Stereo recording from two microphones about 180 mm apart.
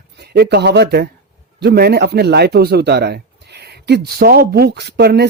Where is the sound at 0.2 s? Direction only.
65° right (ahead or behind).